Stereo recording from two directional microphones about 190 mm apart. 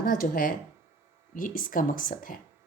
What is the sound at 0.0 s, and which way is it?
A woman's voice, 50° left (ahead or behind).